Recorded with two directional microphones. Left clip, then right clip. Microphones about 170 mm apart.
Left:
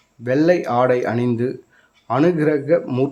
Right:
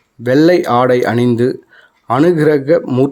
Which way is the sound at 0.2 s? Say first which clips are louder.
Right 6 dB; 35° right (ahead or behind).